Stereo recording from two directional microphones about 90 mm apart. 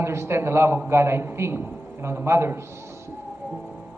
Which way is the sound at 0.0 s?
30° right (ahead or behind).